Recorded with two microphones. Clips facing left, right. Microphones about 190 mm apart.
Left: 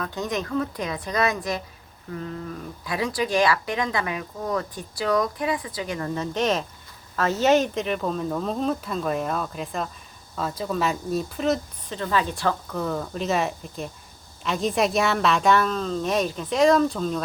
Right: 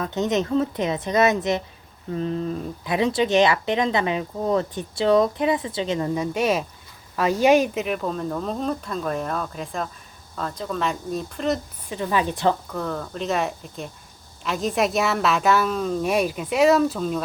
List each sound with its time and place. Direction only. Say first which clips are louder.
0.0 s speech: right 5 dB; 25° right (ahead or behind)
6.1 s a woman's voice: left 1 dB; 10° right (ahead or behind)
11.9 s speech: right 2 dB; 15° right (ahead or behind)
12.7 s a woman's voice: left 1 dB; 5° left (ahead or behind)